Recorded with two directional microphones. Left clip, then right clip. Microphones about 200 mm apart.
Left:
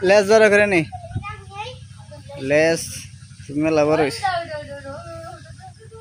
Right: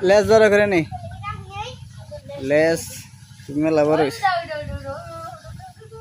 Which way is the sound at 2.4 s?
Centre (ahead or behind).